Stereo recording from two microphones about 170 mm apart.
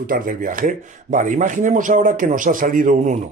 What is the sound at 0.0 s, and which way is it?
Speech, 55° right (ahead or behind).